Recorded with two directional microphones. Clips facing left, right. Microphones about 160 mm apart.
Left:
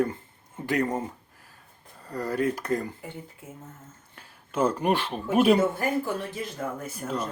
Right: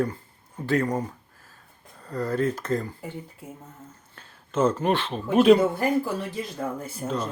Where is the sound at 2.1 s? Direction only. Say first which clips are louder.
Right 1 dB; 10° left (ahead or behind).